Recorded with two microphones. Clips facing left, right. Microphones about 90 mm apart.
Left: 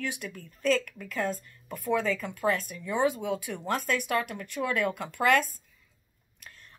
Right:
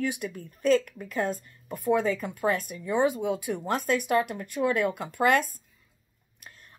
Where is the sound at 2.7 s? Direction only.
25° right (ahead or behind).